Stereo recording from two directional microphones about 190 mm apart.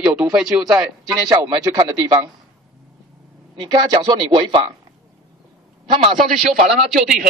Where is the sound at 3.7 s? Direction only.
25° right (ahead or behind).